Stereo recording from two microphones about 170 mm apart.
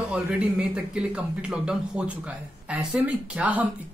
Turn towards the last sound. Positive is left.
turn(degrees=-10)  # may be behind; listen again after turning